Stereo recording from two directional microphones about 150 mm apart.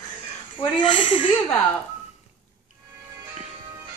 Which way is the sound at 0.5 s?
30° left (ahead or behind).